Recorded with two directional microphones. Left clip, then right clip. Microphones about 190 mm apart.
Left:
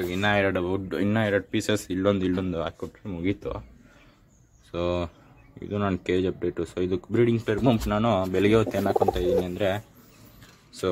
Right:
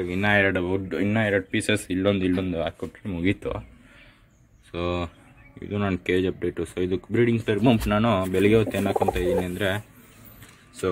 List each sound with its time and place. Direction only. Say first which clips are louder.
0.1 s speech: right 3 dB; 5° right (ahead or behind)
0.8 s speech: right 1 dB; 15° left (ahead or behind)
1.1 s speech: right 2 dB; centre (ahead or behind)
3.1 s speech: right 3 dB; 10° right (ahead or behind)
4.7 s speech: left 1 dB; 5° left (ahead or behind)